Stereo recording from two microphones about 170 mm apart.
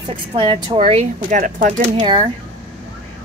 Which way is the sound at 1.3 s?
50° right (ahead or behind).